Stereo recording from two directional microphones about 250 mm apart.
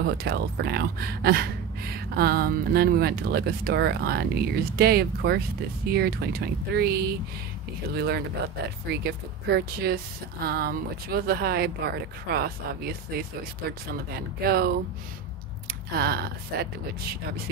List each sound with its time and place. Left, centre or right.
0.0 s speech: right
16.0 s speech: right